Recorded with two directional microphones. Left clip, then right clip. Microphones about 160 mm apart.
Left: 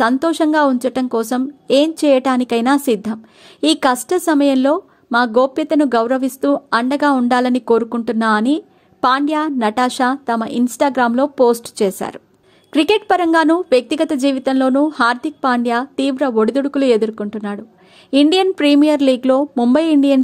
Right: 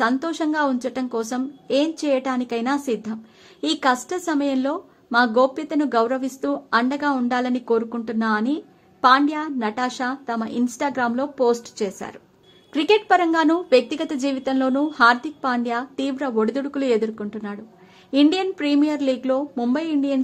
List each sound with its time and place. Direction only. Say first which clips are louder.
0.0 s a woman's voice: left 7 dB; 35° left (ahead or behind)